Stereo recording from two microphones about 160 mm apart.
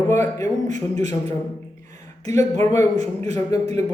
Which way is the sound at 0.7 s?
45° right (ahead or behind).